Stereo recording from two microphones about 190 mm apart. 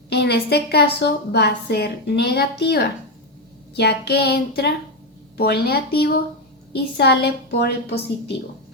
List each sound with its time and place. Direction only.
0.1 s a woman's voice: 60° left (ahead or behind)